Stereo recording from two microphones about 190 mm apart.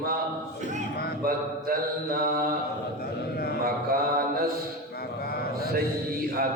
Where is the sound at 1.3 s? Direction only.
50° right (ahead or behind).